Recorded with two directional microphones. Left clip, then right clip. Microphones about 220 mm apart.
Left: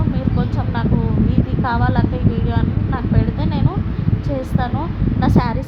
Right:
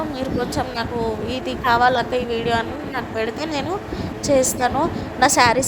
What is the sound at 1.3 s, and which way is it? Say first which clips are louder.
Speech: right 4 dB; 30° right (ahead or behind).